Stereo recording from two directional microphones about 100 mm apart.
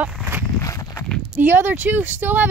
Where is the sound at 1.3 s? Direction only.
20° right (ahead or behind).